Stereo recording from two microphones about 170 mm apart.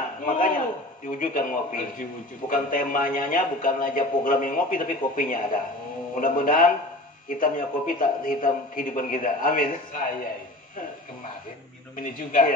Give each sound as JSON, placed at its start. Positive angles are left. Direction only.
{"t": 0.2, "sound": "a man's voice", "side_deg": 50}
{"t": 12.0, "sound": "a man's voice", "side_deg": 55}